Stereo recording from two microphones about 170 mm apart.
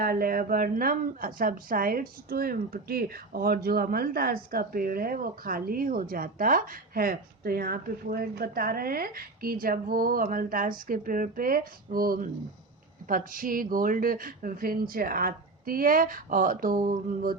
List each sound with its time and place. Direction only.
0.0 s a woman's voice: 60° right (ahead or behind)